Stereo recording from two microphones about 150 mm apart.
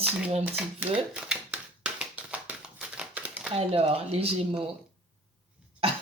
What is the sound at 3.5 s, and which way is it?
Speech, 40° right (ahead or behind).